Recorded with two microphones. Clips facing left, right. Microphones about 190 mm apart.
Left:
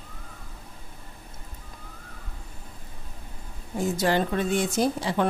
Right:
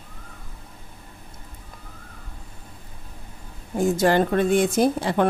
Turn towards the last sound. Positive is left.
turn(degrees=-55)  # may be behind; listen again after turning